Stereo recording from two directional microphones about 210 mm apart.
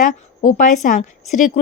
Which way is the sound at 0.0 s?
35° left (ahead or behind).